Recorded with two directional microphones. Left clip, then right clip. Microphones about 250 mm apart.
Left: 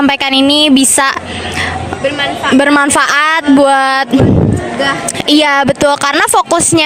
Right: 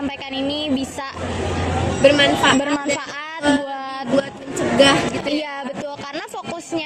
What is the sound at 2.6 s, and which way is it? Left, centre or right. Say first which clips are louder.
A woman's voice: left 13 dB; left.